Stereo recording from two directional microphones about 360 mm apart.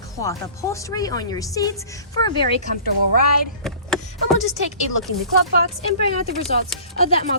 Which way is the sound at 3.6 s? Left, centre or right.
Centre.